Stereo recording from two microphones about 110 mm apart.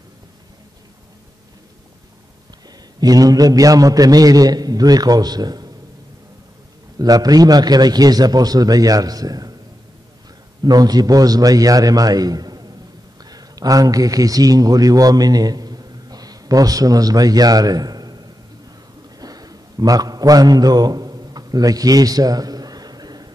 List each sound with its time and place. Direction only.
3.0 s a man's voice: 35° right (ahead or behind)
7.0 s a man's voice: 35° right (ahead or behind)
10.6 s a man's voice: 35° right (ahead or behind)
19.1 s mantra: 35° right (ahead or behind)